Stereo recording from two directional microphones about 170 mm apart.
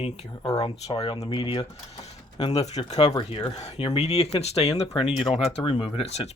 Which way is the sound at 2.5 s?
40° left (ahead or behind).